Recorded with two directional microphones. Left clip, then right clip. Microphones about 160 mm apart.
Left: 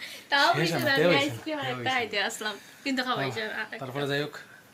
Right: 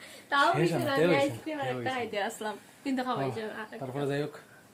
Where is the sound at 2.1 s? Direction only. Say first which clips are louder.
Left 3 dB; 25° right (ahead or behind).